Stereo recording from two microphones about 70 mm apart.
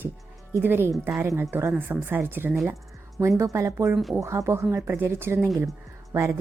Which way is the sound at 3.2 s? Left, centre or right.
Right.